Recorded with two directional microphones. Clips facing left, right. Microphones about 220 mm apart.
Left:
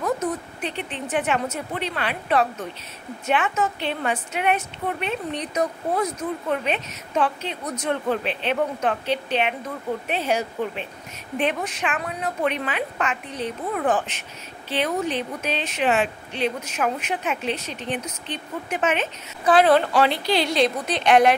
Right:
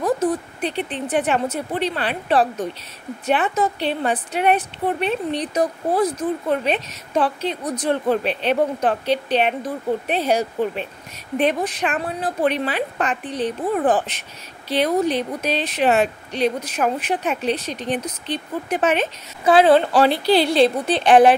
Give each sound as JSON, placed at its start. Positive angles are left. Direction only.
{"t": 0.0, "sound": "a woman's voice", "side_deg": -30}